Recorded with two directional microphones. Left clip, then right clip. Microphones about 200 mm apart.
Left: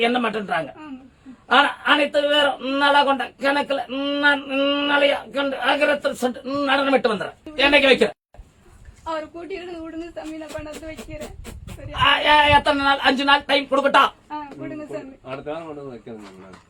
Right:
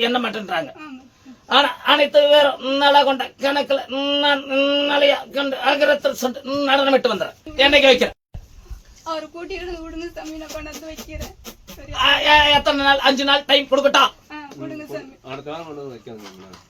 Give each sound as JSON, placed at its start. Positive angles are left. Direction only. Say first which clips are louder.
{"t": 0.0, "sound": "a man's voice", "louder": "even", "side_deg": 10}
{"t": 11.9, "sound": "a man's voice", "louder": "right 2 dB", "side_deg": 10}